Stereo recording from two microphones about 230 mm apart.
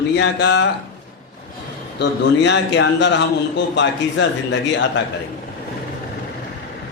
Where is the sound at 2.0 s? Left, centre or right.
Left.